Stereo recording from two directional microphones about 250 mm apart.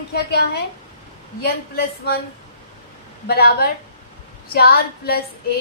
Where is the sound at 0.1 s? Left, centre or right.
Left.